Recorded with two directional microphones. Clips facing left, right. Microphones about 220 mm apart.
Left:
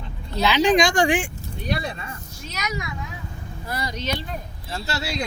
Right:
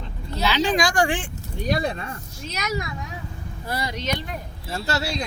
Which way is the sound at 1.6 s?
45° right (ahead or behind).